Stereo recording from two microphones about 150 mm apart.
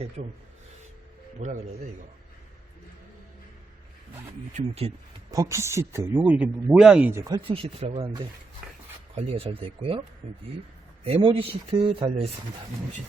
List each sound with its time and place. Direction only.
0.2 s speech: 50° right (ahead or behind)
1.4 s speech: 55° right (ahead or behind)
4.5 s speech: 45° right (ahead or behind)
5.3 s speech: 20° right (ahead or behind); by 7.1 s 5° right (ahead or behind)
7.1 s speech: 20° right (ahead or behind)
7.4 s speech: 40° right (ahead or behind)
8.6 s a sound: 5° right (ahead or behind)
9.1 s speech: 40° right (ahead or behind)